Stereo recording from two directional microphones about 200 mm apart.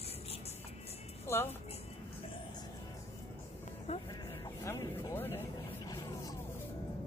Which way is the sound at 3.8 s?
30° left (ahead or behind).